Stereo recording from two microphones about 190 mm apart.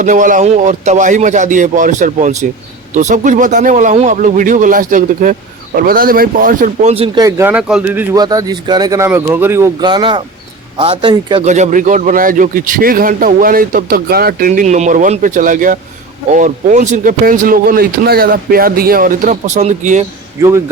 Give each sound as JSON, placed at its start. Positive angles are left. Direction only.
{"t": 0.0, "sound": "a man's voice", "side_deg": -45}
{"t": 7.2, "sound": "speech", "side_deg": -15}
{"t": 11.4, "sound": "a man's voice", "side_deg": -40}
{"t": 20.4, "sound": "speech", "side_deg": -15}